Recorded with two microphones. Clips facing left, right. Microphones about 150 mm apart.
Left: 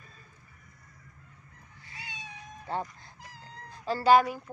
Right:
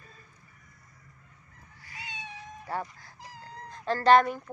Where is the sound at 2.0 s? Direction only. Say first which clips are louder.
Right 3 dB; 25° right (ahead or behind).